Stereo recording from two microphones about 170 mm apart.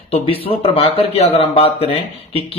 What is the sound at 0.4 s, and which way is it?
Speech, 35° left (ahead or behind).